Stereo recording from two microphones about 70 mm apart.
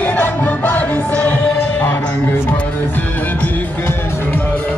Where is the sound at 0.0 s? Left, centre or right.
Left.